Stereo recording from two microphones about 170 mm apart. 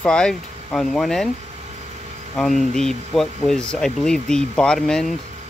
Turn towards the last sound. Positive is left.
turn(degrees=5)  # may be behind; listen again after turning